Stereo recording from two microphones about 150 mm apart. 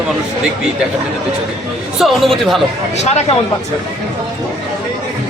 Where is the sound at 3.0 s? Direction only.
45° left (ahead or behind).